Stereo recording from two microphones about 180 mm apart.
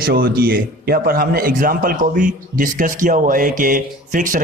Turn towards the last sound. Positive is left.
turn(degrees=-45)  # may be behind; listen again after turning